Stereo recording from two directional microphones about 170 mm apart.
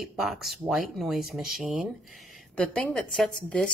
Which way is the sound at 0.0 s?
Centre (ahead or behind).